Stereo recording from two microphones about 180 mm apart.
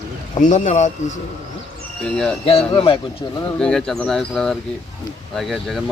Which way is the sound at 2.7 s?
25° left (ahead or behind).